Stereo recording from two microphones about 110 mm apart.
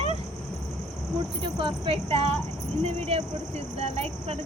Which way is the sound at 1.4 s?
55° right (ahead or behind).